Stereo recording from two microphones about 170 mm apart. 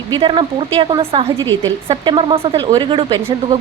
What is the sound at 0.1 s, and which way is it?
A woman's voice, 30° right (ahead or behind).